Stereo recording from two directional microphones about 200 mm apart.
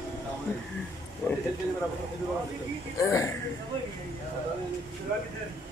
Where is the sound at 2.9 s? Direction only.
15° left (ahead or behind).